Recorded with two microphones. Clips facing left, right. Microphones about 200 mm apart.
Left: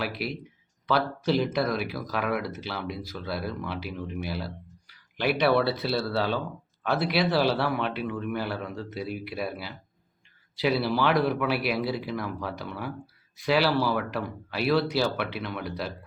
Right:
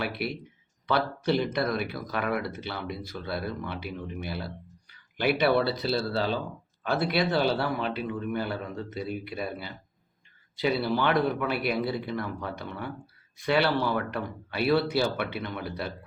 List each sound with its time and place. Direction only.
0.0 s speech: centre (ahead or behind)